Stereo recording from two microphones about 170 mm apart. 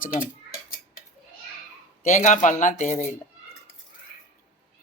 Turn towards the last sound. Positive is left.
turn(degrees=45)  # may be behind; listen again after turning